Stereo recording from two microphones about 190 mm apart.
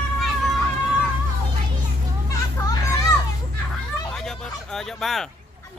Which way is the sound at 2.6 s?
15° left (ahead or behind).